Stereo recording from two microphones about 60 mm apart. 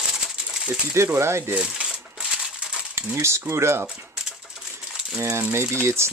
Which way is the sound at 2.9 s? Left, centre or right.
Right.